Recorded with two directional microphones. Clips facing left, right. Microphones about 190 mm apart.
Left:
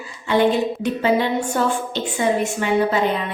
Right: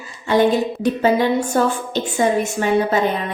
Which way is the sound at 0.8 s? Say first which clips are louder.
Right 5 dB; 40° right (ahead or behind).